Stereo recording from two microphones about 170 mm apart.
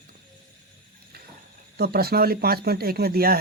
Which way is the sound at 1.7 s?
65° right (ahead or behind).